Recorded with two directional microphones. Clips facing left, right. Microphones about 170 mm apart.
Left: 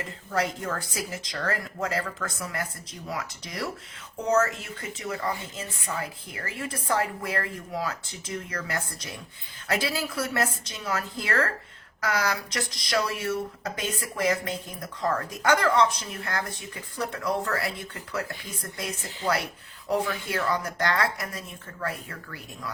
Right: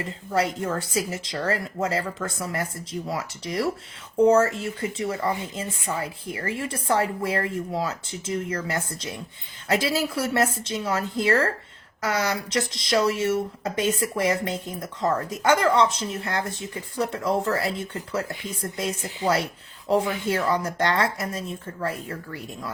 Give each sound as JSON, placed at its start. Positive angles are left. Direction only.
{"t": 0.3, "sound": "speech", "side_deg": -25}